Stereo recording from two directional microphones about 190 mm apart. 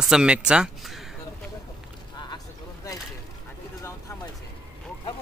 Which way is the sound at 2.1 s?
20° left (ahead or behind).